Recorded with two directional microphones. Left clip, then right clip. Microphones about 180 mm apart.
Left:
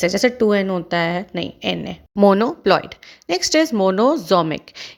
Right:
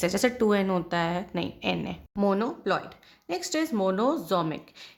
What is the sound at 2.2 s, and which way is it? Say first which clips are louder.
Speech: left 12 dB; 45° left (ahead or behind).